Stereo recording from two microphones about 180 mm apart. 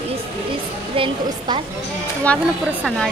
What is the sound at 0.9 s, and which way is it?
Speech, 30° right (ahead or behind).